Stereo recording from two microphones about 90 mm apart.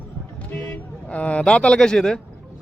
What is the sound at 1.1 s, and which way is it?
A man's voice, 15° left (ahead or behind).